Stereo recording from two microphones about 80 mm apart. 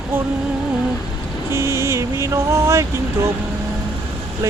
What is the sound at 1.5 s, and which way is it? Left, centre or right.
Speech, right.